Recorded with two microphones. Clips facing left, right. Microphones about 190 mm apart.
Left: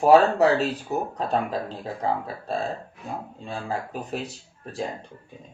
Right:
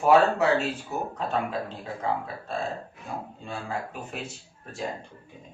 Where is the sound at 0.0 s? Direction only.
35° left (ahead or behind).